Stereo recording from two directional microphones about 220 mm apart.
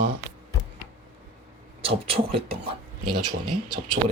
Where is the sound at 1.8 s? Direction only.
25° right (ahead or behind).